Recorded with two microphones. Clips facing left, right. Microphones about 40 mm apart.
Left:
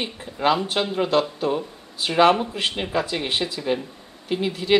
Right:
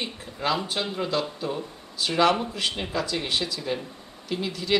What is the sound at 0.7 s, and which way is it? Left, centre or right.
A woman's voice, left.